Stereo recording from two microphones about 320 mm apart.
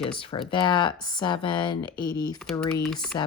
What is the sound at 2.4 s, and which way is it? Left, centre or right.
Speech, centre.